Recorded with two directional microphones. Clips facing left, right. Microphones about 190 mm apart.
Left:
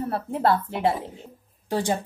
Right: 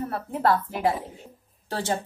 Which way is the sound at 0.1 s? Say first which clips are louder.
Left 1 dB; 30° left (ahead or behind).